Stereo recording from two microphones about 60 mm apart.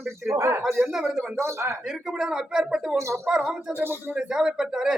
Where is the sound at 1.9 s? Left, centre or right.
Centre.